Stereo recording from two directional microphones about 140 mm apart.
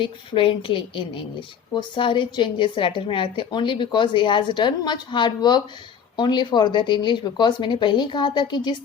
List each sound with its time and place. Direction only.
0.0 s a woman's voice: 40° left (ahead or behind)